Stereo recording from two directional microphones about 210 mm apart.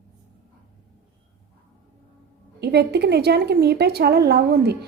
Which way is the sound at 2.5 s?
50° right (ahead or behind).